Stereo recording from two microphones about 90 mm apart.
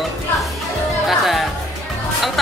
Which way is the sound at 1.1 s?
Centre (ahead or behind).